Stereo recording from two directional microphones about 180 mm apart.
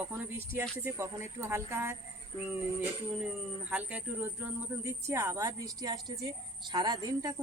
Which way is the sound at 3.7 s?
10° right (ahead or behind).